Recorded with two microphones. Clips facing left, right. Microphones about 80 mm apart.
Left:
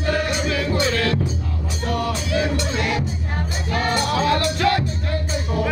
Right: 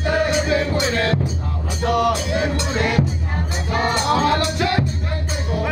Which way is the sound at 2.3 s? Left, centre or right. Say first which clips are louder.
Right 1 dB; right.